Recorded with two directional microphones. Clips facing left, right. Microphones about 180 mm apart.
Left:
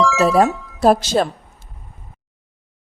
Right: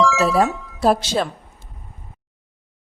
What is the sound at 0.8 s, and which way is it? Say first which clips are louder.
Speech: left 3 dB; 45° left (ahead or behind).